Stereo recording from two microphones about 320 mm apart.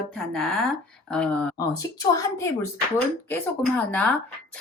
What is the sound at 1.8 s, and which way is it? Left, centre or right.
A woman's voice, centre.